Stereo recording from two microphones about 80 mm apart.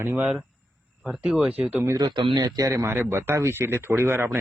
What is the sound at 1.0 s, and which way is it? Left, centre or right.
Speech, centre.